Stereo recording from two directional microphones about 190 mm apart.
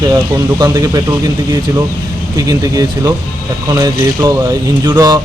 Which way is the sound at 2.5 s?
20° right (ahead or behind).